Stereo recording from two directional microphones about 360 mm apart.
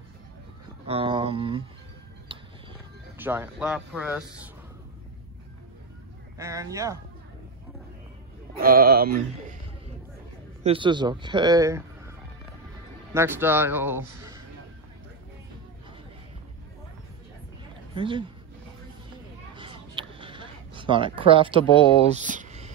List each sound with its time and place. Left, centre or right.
0.8 s speech: centre
2.3 s music: centre
3.2 s speech: centre
6.3 s speech: centre
8.5 s speech: right
10.6 s speech: centre
17.9 s speech: centre
19.5 s a sound: centre
21.2 s speech: centre